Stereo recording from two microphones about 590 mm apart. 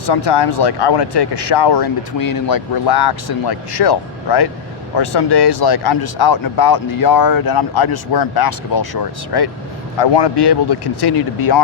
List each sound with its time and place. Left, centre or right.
0.0 s speech: left